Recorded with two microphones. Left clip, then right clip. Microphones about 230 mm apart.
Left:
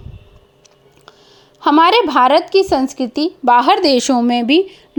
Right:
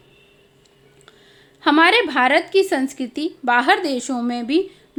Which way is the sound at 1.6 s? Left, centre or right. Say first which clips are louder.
Left 4 dB; left.